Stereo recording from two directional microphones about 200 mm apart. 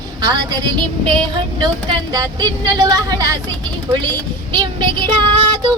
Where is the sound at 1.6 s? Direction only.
20° right (ahead or behind).